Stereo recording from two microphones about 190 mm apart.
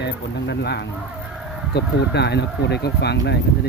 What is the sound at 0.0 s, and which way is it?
Speech, 65° left (ahead or behind).